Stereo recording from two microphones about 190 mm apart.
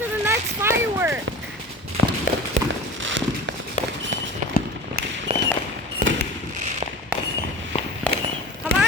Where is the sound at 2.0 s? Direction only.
90° right.